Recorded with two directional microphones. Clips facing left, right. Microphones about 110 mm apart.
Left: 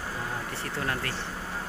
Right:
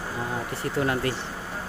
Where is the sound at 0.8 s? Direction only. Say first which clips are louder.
Right 7 dB; 15° right (ahead or behind).